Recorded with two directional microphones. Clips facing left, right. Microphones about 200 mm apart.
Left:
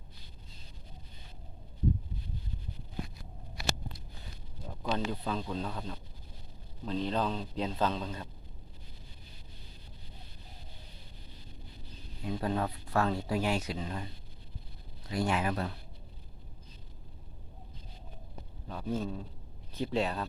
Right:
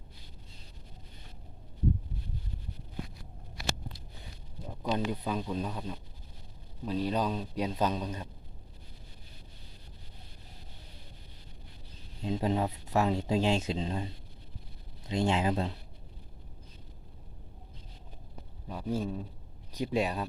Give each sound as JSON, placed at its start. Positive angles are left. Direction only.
{"t": 4.7, "sound": "a man's voice", "side_deg": -15}
{"t": 12.2, "sound": "speech", "side_deg": -20}
{"t": 18.7, "sound": "a man's voice", "side_deg": -10}